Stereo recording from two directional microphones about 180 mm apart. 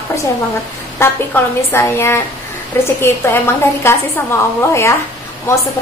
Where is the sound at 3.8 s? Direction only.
15° left (ahead or behind).